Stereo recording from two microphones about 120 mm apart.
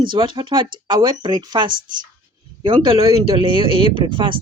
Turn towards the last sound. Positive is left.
turn(degrees=-45)  # may be behind; listen again after turning